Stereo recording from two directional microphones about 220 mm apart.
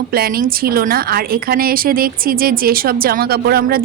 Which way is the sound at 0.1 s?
40° right (ahead or behind).